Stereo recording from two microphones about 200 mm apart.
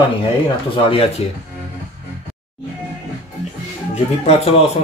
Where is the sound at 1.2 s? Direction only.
30° left (ahead or behind).